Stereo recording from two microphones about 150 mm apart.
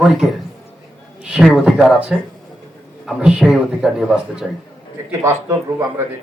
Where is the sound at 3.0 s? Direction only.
5° right (ahead or behind).